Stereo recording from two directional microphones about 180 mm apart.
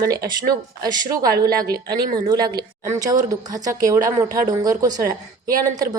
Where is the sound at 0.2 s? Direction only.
55° right (ahead or behind).